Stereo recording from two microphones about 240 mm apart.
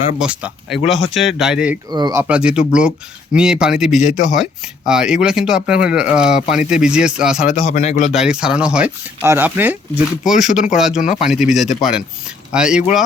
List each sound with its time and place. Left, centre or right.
0.2 s speech: centre
1.9 s speech: centre
2.2 s speech: centre
7.4 s a man's voice: left
8.1 s speech: centre